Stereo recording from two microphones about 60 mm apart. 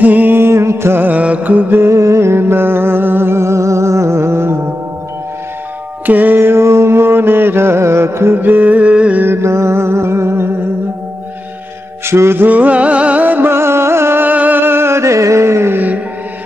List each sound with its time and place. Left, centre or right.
0.0 s music: right
0.4 s music: right
1.0 s music: right
1.8 s music: right
6.0 s mantra: right
9.2 s music: right
12.1 s music: right
12.4 s music: right
14.3 s music: right